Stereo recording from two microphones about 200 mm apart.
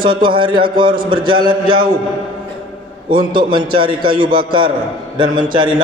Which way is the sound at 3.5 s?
25° right (ahead or behind).